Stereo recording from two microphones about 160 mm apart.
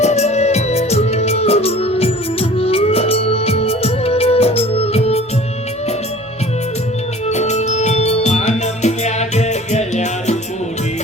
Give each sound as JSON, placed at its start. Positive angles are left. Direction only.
{"t": 0.0, "sound": "music", "side_deg": 45}
{"t": 7.3, "sound": "music", "side_deg": 45}